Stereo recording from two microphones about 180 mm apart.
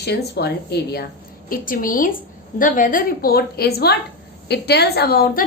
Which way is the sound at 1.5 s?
50° left (ahead or behind).